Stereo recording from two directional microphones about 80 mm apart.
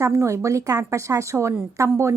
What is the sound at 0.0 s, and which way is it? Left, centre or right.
Speech, right.